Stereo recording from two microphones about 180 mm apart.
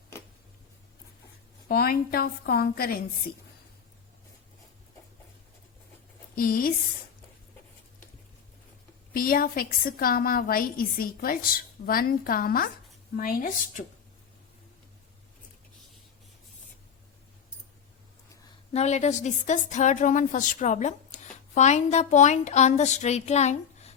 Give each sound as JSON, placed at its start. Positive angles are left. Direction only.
{"t": 1.6, "sound": "a woman's voice", "side_deg": 55}
{"t": 6.3, "sound": "a woman's voice", "side_deg": 55}
{"t": 9.1, "sound": "a woman's voice", "side_deg": 55}
{"t": 18.7, "sound": "a woman's voice", "side_deg": 40}